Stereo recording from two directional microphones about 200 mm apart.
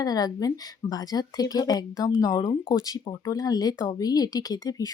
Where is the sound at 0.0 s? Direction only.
20° left (ahead or behind).